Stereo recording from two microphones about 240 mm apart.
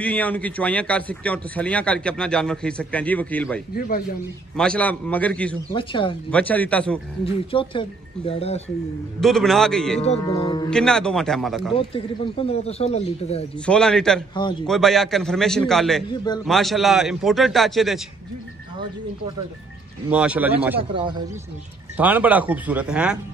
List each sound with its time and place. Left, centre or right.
0.0 s a man's voice: centre
3.7 s a man's voice: left
4.6 s a man's voice: centre
5.7 s speech: left
6.3 s a man's voice: centre
7.2 s speech: left
9.2 s a man's voice: centre
10.2 s a man's voice: centre
10.7 s a man's voice: centre
11.7 s speech: left
13.7 s a man's voice: centre
20.1 s speech: centre
20.9 s speech: centre
21.9 s speech: centre